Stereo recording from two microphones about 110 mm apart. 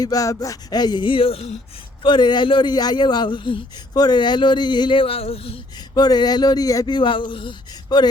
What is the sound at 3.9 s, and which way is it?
A man's voice, 40° left (ahead or behind).